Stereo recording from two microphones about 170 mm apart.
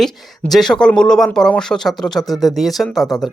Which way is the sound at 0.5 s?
5° left (ahead or behind).